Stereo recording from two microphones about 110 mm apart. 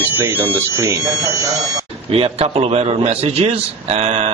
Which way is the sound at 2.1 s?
65° right (ahead or behind).